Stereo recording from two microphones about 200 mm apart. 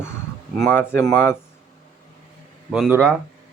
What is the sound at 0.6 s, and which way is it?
Speech, 10° left (ahead or behind).